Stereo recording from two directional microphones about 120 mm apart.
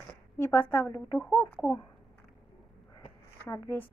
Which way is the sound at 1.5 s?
5° left (ahead or behind).